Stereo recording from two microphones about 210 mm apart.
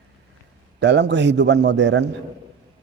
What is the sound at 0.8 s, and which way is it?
A man's voice, 55° right (ahead or behind).